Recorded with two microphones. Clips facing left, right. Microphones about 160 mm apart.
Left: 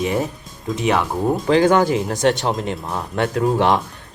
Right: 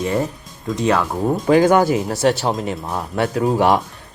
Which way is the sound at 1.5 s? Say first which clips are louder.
Right 2 dB; 10° right (ahead or behind).